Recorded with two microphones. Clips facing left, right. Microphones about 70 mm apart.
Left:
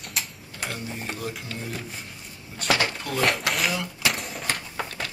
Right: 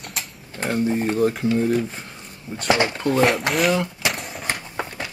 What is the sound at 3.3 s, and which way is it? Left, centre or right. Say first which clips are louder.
Speech: right 6 dB; centre.